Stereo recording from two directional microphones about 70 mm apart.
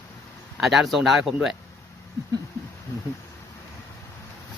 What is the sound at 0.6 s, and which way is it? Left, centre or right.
Speech, centre.